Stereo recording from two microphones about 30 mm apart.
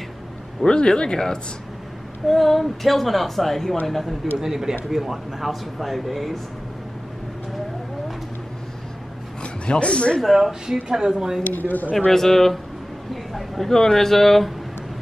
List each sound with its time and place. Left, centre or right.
0.7 s speech: left
2.2 s speech: centre
4.4 s speech: centre
9.4 s speech: left
10.2 s speech: centre
10.9 s speech: right
11.5 s speech: left
12.1 s speech: centre
13.1 s a sound: centre
13.7 s speech: centre
13.9 s speech: centre